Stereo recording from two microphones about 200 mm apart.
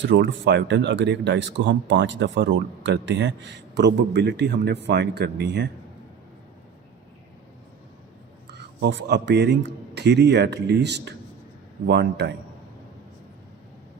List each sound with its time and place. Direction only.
0.0 s speech: 60° right (ahead or behind)
8.8 s speech: 60° right (ahead or behind)